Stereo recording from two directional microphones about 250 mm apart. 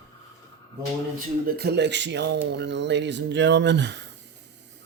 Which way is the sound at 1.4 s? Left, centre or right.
Right.